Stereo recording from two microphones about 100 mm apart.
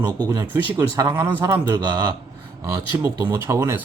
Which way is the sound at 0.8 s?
35° right (ahead or behind).